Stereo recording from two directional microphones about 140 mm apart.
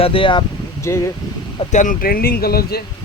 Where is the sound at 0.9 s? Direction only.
20° left (ahead or behind).